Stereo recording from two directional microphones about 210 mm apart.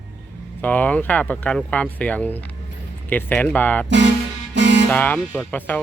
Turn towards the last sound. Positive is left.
turn(degrees=10)  # may be behind; listen again after turning